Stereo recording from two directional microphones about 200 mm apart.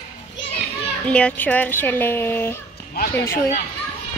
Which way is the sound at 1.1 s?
5° left (ahead or behind).